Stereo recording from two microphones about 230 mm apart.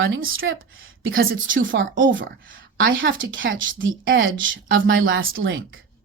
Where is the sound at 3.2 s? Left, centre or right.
Right.